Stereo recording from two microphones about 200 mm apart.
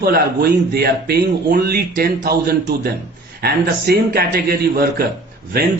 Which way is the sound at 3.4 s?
50° right (ahead or behind).